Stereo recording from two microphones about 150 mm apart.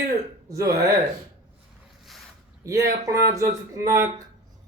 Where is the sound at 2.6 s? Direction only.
20° right (ahead or behind).